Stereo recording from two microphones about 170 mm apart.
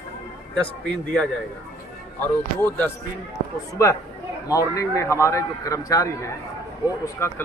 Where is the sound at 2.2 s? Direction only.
10° left (ahead or behind).